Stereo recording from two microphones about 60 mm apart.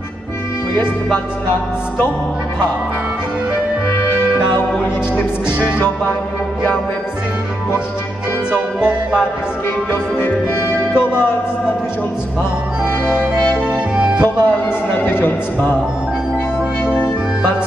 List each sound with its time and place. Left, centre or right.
5.1 s speech: left
8.5 s music: centre
9.8 s music: left
12.8 s music: centre
14.4 s speech: left
16.9 s music: centre